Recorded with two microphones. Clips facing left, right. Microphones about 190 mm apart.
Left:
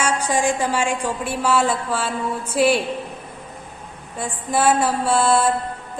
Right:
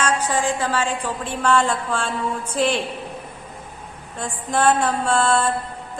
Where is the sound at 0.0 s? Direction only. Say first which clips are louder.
Left 1 dB; 10° left (ahead or behind).